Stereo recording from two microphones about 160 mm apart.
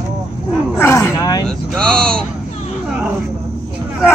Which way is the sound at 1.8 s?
5° left (ahead or behind).